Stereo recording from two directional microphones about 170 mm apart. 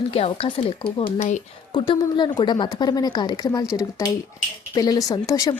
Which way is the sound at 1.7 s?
25° left (ahead or behind).